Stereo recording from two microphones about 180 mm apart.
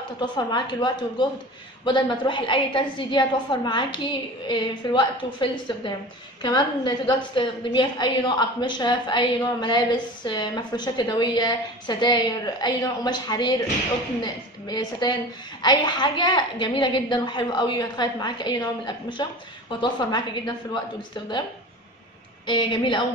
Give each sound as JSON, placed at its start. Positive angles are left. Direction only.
{"t": 0.2, "sound": "a woman's voice", "side_deg": 25}
{"t": 22.5, "sound": "a woman's voice", "side_deg": 25}